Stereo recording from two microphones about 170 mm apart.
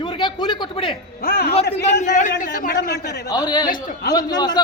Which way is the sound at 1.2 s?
65° left (ahead or behind).